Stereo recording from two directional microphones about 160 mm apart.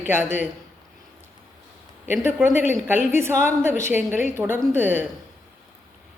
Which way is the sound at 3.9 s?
10° right (ahead or behind).